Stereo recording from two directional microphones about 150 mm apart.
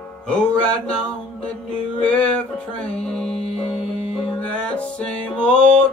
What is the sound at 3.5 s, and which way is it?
Music, 40° left (ahead or behind).